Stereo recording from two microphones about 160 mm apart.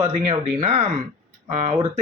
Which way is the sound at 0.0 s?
45° right (ahead or behind).